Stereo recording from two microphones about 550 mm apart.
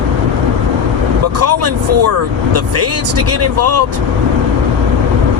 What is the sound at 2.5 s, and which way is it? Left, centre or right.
Speech, right.